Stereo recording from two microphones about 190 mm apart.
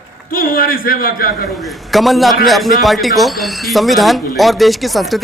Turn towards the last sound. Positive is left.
turn(degrees=0)  # may be behind; listen again after turning